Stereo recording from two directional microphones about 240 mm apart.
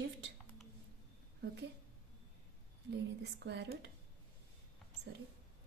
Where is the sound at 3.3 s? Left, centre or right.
Right.